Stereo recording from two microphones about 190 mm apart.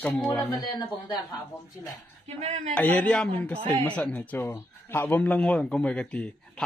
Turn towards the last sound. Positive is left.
turn(degrees=5)  # may be behind; listen again after turning